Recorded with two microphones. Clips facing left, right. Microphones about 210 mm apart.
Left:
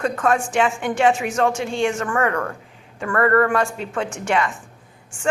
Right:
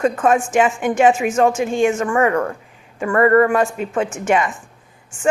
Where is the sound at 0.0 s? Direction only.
20° right (ahead or behind).